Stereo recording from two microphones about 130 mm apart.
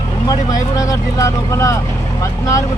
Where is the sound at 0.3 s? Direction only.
30° left (ahead or behind).